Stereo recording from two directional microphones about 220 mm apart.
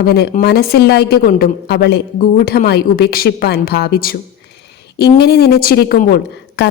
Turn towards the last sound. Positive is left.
turn(degrees=45)  # may be behind; listen again after turning